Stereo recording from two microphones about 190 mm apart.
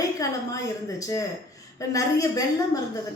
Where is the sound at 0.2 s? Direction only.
15° left (ahead or behind).